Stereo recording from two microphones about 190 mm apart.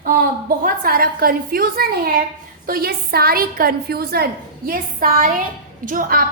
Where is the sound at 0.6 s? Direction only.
50° right (ahead or behind).